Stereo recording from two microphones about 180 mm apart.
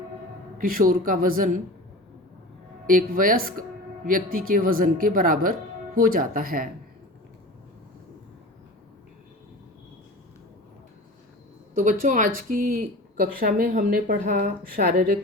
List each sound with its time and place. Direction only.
0.6 s speech: 50° right (ahead or behind)
2.8 s speech: 50° right (ahead or behind)
11.7 s speech: 45° right (ahead or behind)